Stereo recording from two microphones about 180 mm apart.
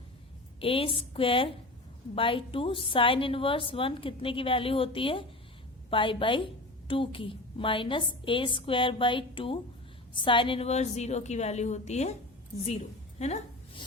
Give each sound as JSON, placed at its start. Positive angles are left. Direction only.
{"t": 0.6, "sound": "a woman's voice", "side_deg": 30}
{"t": 13.1, "sound": "a woman's voice", "side_deg": 40}